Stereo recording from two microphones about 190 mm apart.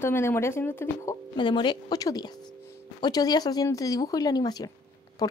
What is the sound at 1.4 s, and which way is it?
Speech, 25° left (ahead or behind).